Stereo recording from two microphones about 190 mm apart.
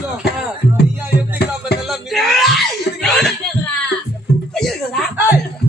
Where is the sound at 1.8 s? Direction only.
Centre (ahead or behind).